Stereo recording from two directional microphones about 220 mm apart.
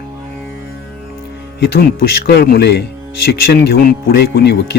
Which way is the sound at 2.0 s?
40° left (ahead or behind).